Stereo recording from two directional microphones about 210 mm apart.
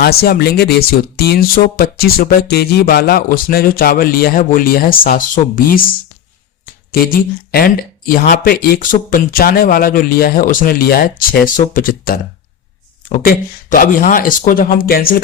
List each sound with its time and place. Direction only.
0.0 s speech: 45° left (ahead or behind)
6.9 s speech: 45° left (ahead or behind)